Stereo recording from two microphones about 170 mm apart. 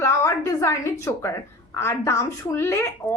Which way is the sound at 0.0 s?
15° left (ahead or behind).